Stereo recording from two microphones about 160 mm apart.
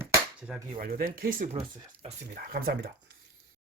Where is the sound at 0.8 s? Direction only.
65° right (ahead or behind).